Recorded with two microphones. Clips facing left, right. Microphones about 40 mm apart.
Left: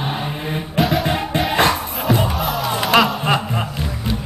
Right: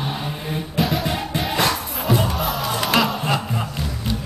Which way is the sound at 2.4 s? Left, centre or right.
Centre.